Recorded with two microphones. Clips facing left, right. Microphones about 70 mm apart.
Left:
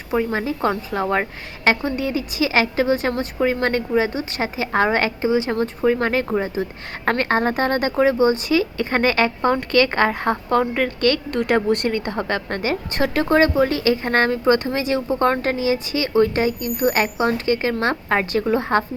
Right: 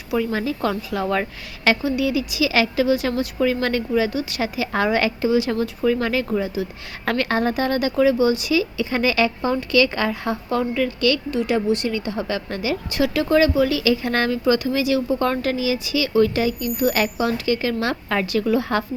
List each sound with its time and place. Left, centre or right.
0.1 s a woman's voice: left